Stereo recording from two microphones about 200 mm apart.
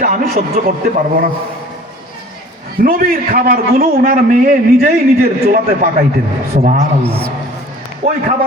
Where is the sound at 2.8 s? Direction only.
45° right (ahead or behind).